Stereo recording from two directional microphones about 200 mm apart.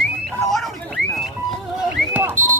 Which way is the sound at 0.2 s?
Centre (ahead or behind).